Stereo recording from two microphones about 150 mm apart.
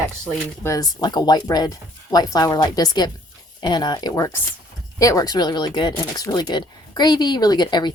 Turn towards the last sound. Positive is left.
turn(degrees=30)  # may be behind; listen again after turning